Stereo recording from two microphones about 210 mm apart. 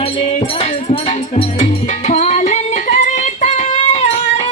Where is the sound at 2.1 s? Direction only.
35° left (ahead or behind).